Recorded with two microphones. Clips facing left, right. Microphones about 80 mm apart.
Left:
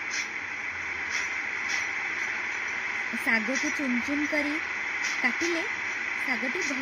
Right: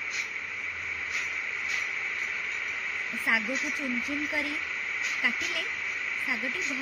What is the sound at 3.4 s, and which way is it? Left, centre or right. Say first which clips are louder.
Speech: left 3 dB; left.